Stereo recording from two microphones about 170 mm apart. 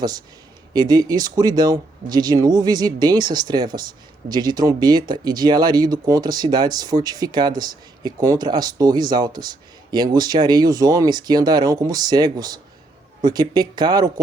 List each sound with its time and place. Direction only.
0.7 s speech: 25° right (ahead or behind)